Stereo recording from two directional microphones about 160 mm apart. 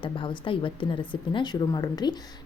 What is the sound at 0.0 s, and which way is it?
Speech, 30° left (ahead or behind).